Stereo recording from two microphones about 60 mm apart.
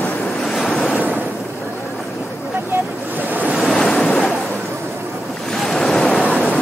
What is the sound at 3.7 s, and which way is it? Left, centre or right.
Waves, centre.